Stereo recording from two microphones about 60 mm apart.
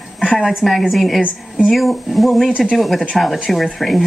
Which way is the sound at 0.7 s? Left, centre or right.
Centre.